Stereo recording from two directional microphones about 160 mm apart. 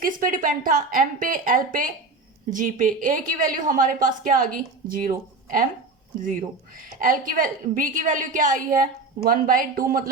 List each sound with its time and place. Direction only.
0.0 s a woman's voice: 60° right (ahead or behind)
6.7 s a woman's voice: 60° right (ahead or behind)